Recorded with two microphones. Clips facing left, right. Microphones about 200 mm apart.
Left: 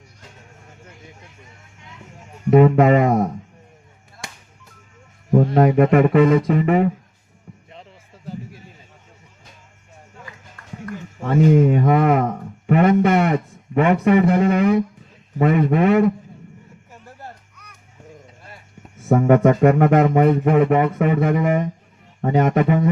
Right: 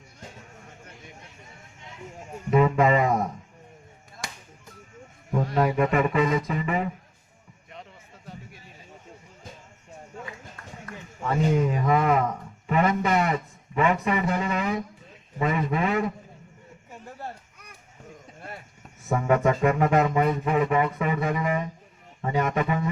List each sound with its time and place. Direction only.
2.5 s speech: 60° left (ahead or behind)
5.3 s a man's voice: 30° left (ahead or behind)
5.5 s speech: 55° left (ahead or behind)
7.7 s music: 30° left (ahead or behind)
11.2 s speech: 55° left (ahead or behind)
19.0 s speech: 55° left (ahead or behind)